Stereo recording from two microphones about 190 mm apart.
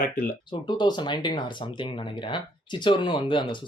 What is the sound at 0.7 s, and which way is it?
Speech, 25° left (ahead or behind).